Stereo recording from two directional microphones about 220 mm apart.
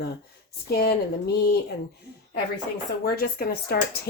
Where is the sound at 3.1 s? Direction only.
45° left (ahead or behind).